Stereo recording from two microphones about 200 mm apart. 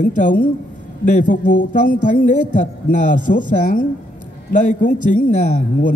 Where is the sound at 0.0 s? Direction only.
40° left (ahead or behind).